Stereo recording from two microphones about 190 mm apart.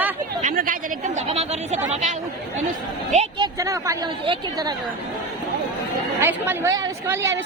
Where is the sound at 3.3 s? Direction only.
20° right (ahead or behind).